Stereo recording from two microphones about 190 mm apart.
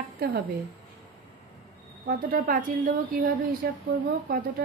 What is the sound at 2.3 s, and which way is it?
A woman's voice, 45° right (ahead or behind).